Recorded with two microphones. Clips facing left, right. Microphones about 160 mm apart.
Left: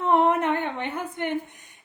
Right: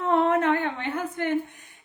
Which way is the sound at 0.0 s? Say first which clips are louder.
Left 1 dB; 15° left (ahead or behind).